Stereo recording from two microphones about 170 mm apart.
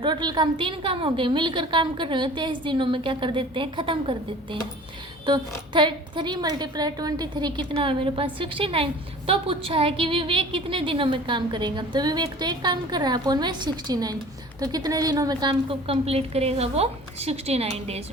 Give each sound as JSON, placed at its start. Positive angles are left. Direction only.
{"t": 0.0, "sound": "a woman's voice", "side_deg": -25}
{"t": 5.2, "sound": "a woman's voice", "side_deg": -25}